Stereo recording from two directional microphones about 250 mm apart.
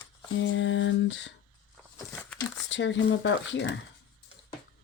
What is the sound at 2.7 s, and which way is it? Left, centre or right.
Speech, left.